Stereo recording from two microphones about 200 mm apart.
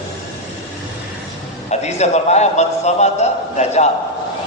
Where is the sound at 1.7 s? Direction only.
35° left (ahead or behind).